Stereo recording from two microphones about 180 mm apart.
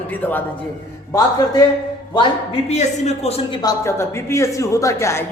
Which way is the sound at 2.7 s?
35° left (ahead or behind).